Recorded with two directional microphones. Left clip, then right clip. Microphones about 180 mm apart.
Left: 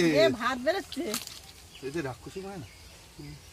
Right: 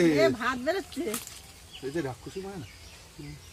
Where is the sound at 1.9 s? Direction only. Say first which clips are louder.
Right 2 dB; 15° left (ahead or behind).